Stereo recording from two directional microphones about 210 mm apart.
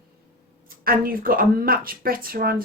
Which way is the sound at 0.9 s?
45° right (ahead or behind).